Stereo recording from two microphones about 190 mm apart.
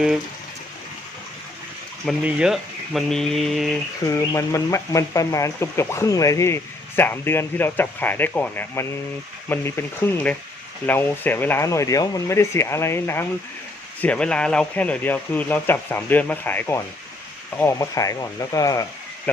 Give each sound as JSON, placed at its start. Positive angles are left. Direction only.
{"t": 2.0, "sound": "speech", "side_deg": 0}
{"t": 4.0, "sound": "speech", "side_deg": 15}